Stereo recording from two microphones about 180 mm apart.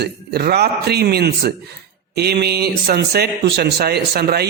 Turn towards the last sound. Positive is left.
turn(degrees=-60)  # may be behind; listen again after turning